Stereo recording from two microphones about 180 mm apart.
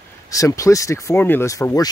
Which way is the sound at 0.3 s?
20° left (ahead or behind).